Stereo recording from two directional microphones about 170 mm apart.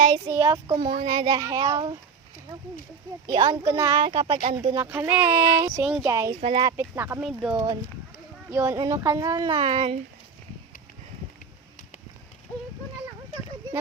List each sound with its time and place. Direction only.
0.3 s a child's voice: 20° right (ahead or behind)
3.2 s a child's voice: 25° right (ahead or behind)
4.7 s speech: 15° right (ahead or behind)
6.4 s a child's voice: 30° right (ahead or behind)
6.7 s speech: 15° right (ahead or behind)
7.2 s speech: 5° right (ahead or behind)
7.5 s a child's voice: 20° right (ahead or behind)